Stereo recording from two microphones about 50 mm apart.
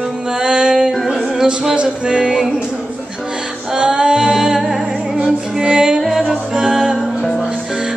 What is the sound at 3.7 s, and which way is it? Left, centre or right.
Music, centre.